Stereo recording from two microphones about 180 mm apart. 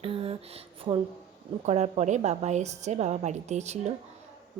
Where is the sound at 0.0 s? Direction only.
30° right (ahead or behind).